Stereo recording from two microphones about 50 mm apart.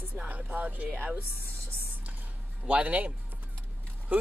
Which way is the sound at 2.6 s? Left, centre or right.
Right.